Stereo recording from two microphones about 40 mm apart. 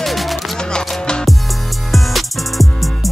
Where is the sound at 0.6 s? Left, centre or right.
Left.